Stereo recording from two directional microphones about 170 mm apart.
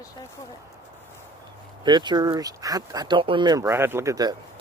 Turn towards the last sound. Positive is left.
turn(degrees=-20)  # may be behind; listen again after turning